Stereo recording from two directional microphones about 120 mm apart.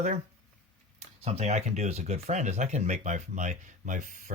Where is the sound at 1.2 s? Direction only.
65° right (ahead or behind).